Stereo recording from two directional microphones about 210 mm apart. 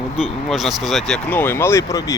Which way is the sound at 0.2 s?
Centre (ahead or behind).